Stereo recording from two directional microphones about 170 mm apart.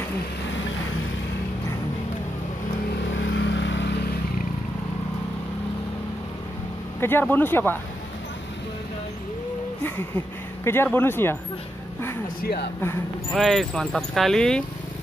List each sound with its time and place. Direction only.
3.3 s vehicle: 90° left
7.0 s speech: 10° left (ahead or behind)
9.8 s speech: 15° left (ahead or behind)
12.4 s speech: 65° left (ahead or behind)
13.3 s speech: centre (ahead or behind)